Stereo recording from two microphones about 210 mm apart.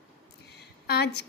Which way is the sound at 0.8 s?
50° left (ahead or behind).